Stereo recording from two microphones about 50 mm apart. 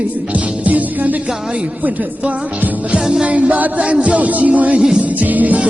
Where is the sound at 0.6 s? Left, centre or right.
Right.